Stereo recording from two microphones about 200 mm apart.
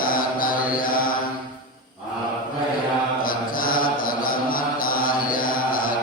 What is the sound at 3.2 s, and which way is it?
Mantra, 45° left (ahead or behind).